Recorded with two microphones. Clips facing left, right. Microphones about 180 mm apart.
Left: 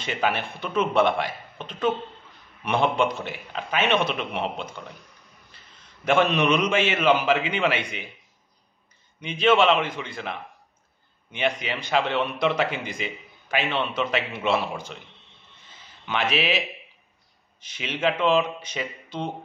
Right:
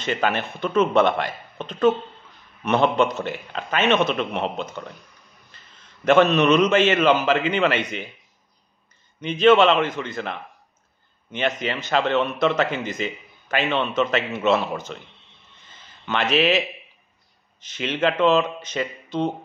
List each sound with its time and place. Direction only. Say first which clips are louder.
0.0 s a man's voice: right 3 dB; 10° left (ahead or behind)
6.0 s a man's voice: right 5 dB; 10° left (ahead or behind)
9.2 s a man's voice: right 4 dB; 10° left (ahead or behind)
11.6 s a man's voice: right 2 dB; 10° left (ahead or behind)
15.7 s a sound: right 3 dB; 10° left (ahead or behind)
17.6 s a man's voice: right 6 dB; 10° left (ahead or behind)